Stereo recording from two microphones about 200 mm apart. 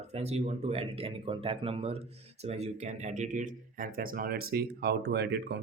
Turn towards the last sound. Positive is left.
turn(degrees=-55)  # may be behind; listen again after turning